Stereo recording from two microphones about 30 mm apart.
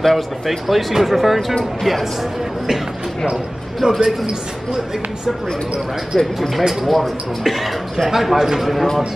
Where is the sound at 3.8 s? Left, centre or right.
Right.